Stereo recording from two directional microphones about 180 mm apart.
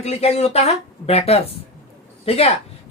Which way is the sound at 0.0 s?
35° left (ahead or behind).